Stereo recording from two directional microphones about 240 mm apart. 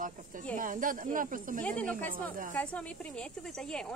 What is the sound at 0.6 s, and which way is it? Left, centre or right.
Speech, right.